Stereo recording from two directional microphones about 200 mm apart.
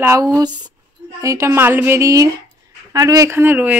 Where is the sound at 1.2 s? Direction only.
15° right (ahead or behind).